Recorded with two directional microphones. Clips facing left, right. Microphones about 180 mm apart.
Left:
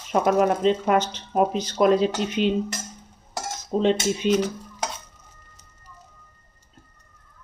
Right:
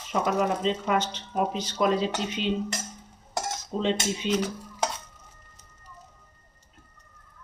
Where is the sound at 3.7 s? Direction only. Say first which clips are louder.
Left 6 dB; 55° left (ahead or behind).